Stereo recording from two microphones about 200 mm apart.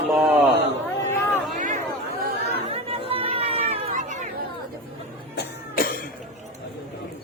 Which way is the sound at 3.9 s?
40° right (ahead or behind).